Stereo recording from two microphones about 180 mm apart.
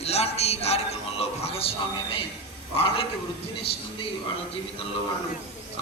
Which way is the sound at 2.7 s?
30° left (ahead or behind).